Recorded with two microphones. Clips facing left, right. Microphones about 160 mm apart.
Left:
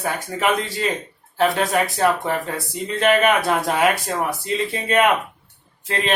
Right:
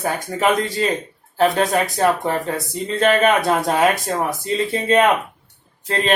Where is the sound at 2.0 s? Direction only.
30° right (ahead or behind).